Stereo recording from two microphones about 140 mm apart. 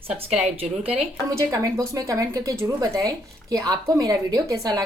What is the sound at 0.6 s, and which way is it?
Speech, 45° right (ahead or behind).